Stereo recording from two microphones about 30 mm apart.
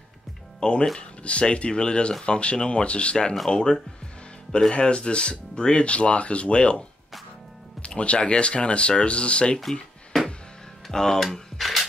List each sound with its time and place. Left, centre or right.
0.6 s speech: left
7.8 s speech: left
10.9 s speech: centre
11.6 s music: centre